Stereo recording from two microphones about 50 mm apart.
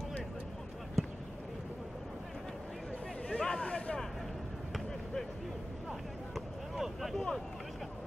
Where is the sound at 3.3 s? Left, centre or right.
Centre.